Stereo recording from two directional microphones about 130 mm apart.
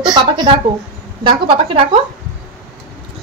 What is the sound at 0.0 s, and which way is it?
A woman's voice, 35° right (ahead or behind).